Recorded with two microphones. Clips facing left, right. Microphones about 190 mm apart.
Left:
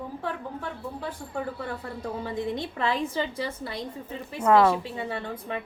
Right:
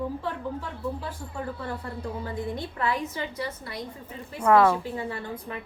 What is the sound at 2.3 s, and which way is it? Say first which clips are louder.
A woman's voice: left 2 dB; 20° left (ahead or behind).